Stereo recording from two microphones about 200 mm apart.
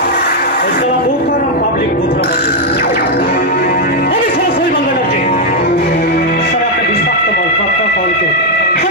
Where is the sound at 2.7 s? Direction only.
50° left (ahead or behind).